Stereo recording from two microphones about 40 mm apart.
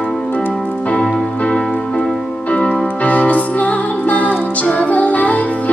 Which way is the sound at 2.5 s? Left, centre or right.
Left.